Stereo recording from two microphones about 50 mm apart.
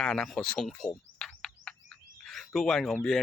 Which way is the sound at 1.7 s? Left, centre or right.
Centre.